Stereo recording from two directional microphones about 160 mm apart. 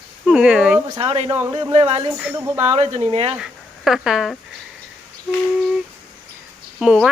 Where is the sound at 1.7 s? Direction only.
40° right (ahead or behind).